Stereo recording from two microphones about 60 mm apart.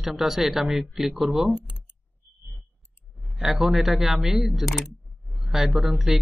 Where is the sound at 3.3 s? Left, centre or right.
Centre.